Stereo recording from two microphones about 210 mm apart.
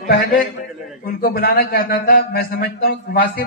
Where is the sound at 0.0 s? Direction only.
45° left (ahead or behind).